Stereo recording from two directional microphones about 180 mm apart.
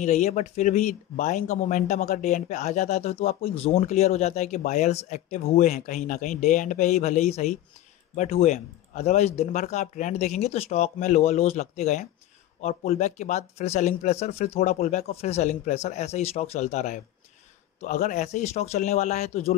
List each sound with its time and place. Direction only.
0.0 s speech: 40° left (ahead or behind)